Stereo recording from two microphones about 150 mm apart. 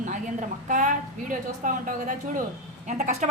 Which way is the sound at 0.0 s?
60° right (ahead or behind).